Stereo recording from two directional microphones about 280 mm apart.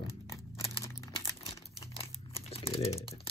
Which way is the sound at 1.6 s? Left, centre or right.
Left.